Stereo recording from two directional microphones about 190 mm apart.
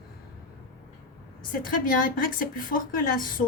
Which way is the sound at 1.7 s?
45° left (ahead or behind).